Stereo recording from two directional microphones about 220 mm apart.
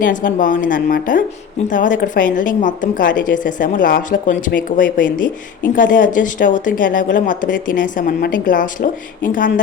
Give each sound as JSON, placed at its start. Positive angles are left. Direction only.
{"t": 0.0, "sound": "speech", "side_deg": 35}